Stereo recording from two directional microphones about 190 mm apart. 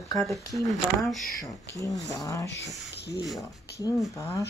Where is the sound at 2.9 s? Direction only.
65° left (ahead or behind).